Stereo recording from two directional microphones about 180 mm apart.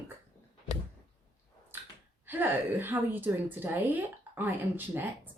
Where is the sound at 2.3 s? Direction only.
10° right (ahead or behind).